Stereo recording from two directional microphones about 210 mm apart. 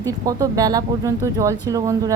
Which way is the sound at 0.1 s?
15° right (ahead or behind).